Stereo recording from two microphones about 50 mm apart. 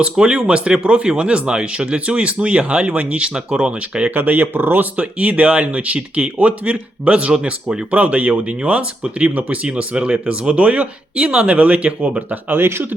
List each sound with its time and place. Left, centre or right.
0.0 s speech: centre
4.1 s speech: right
4.9 s speech: right
12.5 s speech: right